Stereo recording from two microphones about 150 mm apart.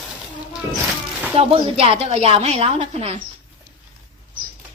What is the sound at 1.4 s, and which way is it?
A woman's voice, 40° right (ahead or behind).